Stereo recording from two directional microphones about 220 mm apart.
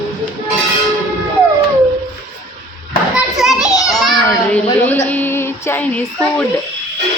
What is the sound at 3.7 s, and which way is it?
Children playing, 15° left (ahead or behind).